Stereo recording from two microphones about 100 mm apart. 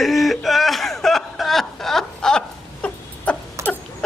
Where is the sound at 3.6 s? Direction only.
30° right (ahead or behind).